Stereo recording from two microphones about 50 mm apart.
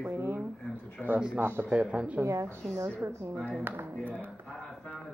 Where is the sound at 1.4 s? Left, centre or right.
Right.